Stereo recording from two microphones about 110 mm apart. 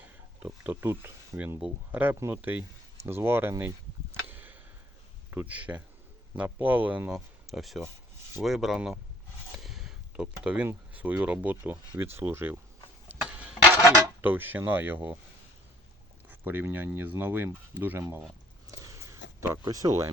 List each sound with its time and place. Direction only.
0.0 s speech: 15° right (ahead or behind)
4.3 s a sound: 15° right (ahead or behind)
5.3 s speech: 15° right (ahead or behind)
7.4 s speech: centre (ahead or behind); by 12.5 s 20° right (ahead or behind)
13.1 s a sound: 15° right (ahead or behind)
13.8 s dishes: 35° right (ahead or behind)
14.2 s speech: 20° right (ahead or behind)
16.3 s speech: 15° right (ahead or behind)
18.7 s a sound: 25° right (ahead or behind)
19.6 s speech: 30° right (ahead or behind)